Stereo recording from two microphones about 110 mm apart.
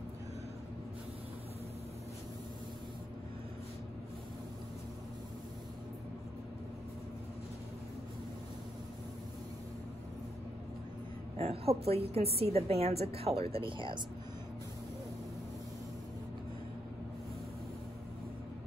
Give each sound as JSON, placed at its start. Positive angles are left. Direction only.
{"t": 11.3, "sound": "a woman's voice", "side_deg": -65}